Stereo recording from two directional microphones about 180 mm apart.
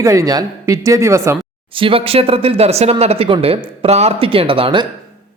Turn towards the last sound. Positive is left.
turn(degrees=-30)  # may be behind; listen again after turning